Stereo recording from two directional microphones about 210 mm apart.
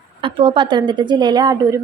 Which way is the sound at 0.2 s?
25° right (ahead or behind).